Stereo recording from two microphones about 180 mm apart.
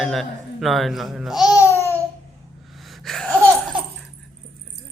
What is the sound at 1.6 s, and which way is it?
Babbling, 15° left (ahead or behind).